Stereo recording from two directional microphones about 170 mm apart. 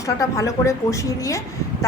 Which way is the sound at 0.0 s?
20° left (ahead or behind).